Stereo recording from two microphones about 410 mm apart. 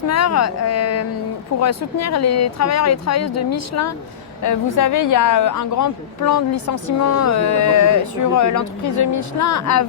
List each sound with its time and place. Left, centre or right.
0.1 s a woman's voice: left